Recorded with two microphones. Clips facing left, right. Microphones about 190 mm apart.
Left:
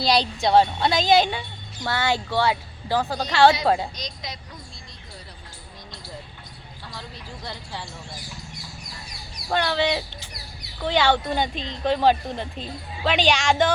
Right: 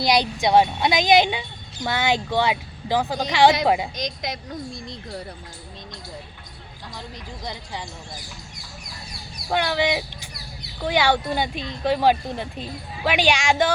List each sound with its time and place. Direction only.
0.0 s speech: 15° right (ahead or behind)
7.4 s speech: 15° right (ahead or behind)
9.5 s speech: 10° right (ahead or behind)